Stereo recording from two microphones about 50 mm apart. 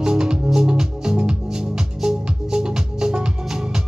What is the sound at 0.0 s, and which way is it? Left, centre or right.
Music, centre.